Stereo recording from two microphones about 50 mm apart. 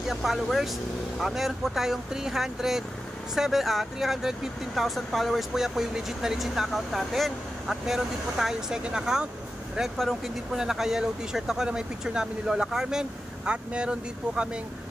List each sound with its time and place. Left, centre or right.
0.1 s speech: centre
4.7 s speech: centre
9.9 s speech: centre